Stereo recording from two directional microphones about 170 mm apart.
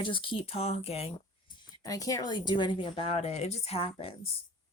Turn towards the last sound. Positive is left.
turn(degrees=35)  # may be behind; listen again after turning